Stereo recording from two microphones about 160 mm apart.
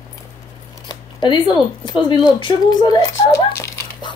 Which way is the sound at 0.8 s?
30° left (ahead or behind).